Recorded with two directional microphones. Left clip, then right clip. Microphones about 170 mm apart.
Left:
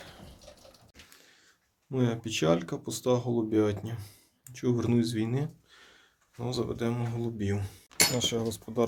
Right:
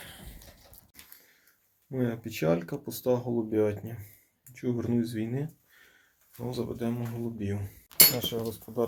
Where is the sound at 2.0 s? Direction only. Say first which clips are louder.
Left 2 dB; 10° left (ahead or behind).